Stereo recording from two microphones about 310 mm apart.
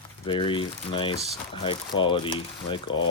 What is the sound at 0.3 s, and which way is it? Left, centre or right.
Speech, centre.